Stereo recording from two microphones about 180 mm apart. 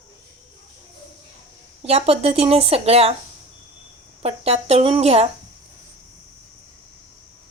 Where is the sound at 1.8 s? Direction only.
35° right (ahead or behind).